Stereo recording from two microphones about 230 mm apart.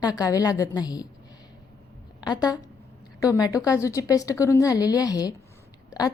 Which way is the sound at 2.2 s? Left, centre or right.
Centre.